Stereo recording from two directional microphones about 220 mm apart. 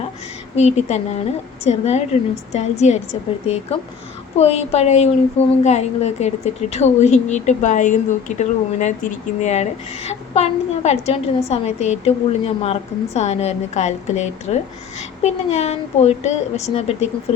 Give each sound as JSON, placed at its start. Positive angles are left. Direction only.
{"t": 0.5, "sound": "a woman's voice", "side_deg": 30}